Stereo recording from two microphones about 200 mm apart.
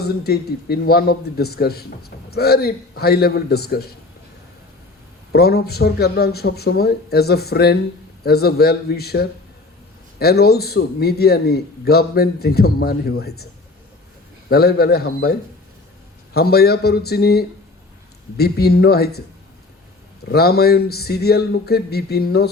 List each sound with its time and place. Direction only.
0.0 s a man's voice: 50° left (ahead or behind)
5.3 s a man's voice: 50° left (ahead or behind)
14.5 s a man's voice: 50° left (ahead or behind)
20.2 s a man's voice: 50° left (ahead or behind)